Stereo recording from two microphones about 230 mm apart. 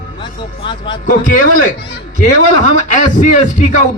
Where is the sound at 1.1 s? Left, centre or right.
Left.